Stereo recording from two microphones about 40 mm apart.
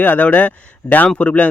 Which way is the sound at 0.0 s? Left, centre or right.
Left.